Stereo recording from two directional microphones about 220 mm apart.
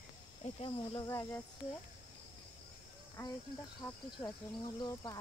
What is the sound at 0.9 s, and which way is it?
Speech, 10° left (ahead or behind).